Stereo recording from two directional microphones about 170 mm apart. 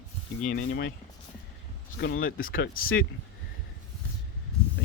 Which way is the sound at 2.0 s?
55° left (ahead or behind).